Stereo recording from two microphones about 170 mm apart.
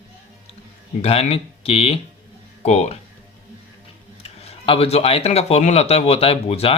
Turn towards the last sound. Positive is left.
turn(degrees=35)  # may be behind; listen again after turning